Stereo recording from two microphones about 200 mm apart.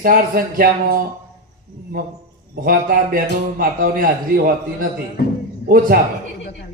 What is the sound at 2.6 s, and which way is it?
Speech, 45° right (ahead or behind).